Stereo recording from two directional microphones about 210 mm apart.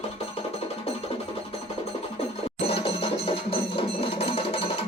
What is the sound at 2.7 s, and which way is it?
Music, 25° left (ahead or behind).